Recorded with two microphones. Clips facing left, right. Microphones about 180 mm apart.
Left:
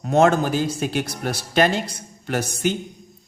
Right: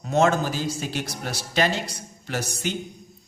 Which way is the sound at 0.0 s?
55° left (ahead or behind).